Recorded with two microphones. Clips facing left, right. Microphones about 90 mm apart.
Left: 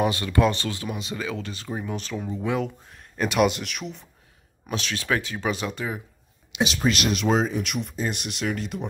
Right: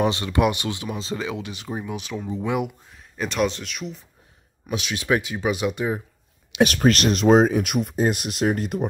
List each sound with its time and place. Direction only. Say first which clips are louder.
0.0 s speech: right 1 dB; 25° right (ahead or behind)
2.9 s speech: left 2 dB; centre (ahead or behind)
4.6 s speech: right 3 dB; 10° right (ahead or behind)
6.5 s speech: right 6 dB; 50° right (ahead or behind)